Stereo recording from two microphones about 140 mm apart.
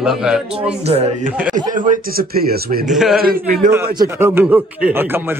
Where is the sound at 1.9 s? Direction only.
90° right.